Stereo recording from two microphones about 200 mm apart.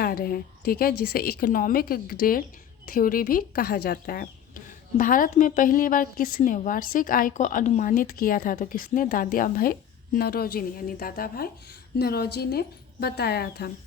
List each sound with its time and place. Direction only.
0.0 s speech: 45° left (ahead or behind)